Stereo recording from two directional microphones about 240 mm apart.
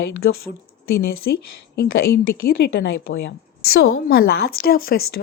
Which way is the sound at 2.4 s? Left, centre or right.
Left.